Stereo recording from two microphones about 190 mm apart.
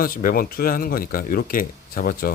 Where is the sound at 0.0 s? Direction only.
50° left (ahead or behind).